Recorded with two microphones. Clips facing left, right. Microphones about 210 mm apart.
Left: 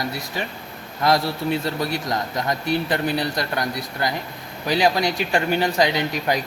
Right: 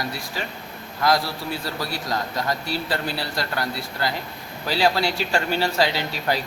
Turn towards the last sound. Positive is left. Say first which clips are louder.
# left 3 dB
turn(degrees=15)  # may be behind; listen again after turning